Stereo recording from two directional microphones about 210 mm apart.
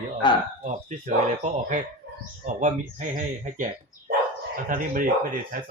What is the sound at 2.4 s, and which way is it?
Speech, 35° right (ahead or behind).